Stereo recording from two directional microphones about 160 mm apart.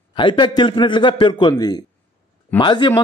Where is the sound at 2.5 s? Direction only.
30° left (ahead or behind).